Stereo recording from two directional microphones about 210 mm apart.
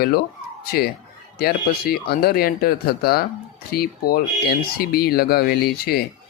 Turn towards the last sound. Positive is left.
turn(degrees=45)  # may be behind; listen again after turning